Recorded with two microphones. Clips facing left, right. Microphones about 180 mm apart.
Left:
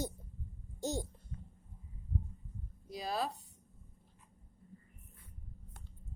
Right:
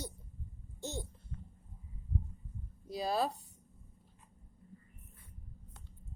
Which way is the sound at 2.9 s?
30° right (ahead or behind).